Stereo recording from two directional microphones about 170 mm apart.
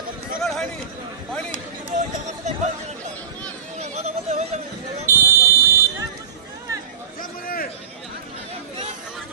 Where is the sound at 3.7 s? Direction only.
40° right (ahead or behind).